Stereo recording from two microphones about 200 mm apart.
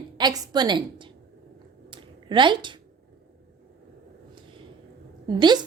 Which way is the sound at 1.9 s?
25° right (ahead or behind).